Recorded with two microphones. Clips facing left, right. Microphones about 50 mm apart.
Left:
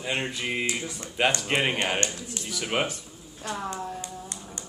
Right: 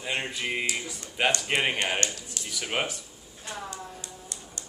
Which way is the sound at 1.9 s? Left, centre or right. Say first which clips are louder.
Left 1 dB; left.